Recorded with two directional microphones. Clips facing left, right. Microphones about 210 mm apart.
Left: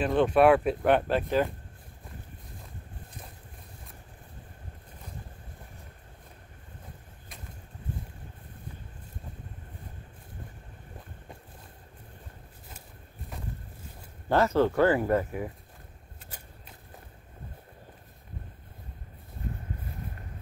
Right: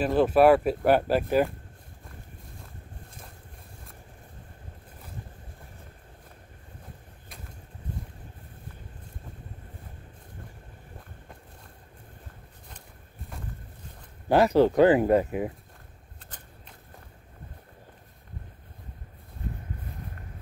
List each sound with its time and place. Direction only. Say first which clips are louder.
0.0 s speech: right 2 dB; 5° right (ahead or behind)
14.3 s speech: right 4 dB; 15° right (ahead or behind)